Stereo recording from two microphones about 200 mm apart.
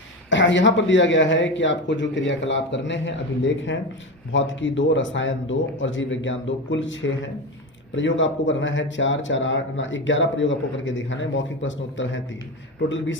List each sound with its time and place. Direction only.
0.3 s speech: 65° left (ahead or behind)